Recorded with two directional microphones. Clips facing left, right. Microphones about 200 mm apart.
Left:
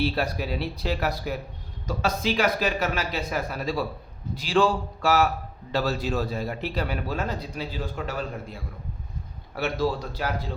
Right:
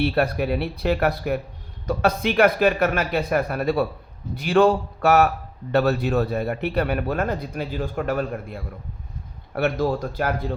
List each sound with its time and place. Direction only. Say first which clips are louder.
0.0 s a man's voice: right 5 dB; 60° right (ahead or behind)